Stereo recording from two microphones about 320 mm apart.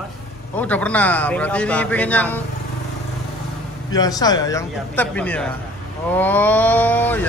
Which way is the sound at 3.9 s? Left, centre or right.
Centre.